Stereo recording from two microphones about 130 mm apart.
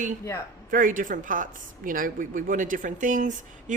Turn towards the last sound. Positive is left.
turn(degrees=-75)  # may be behind; listen again after turning